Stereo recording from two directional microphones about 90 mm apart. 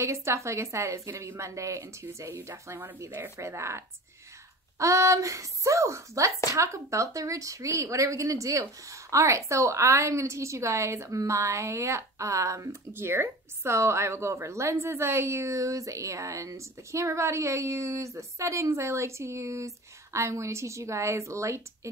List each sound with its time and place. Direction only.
0.0 s a woman's voice: 30° right (ahead or behind)